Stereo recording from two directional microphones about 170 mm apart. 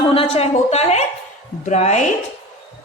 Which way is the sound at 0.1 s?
35° left (ahead or behind).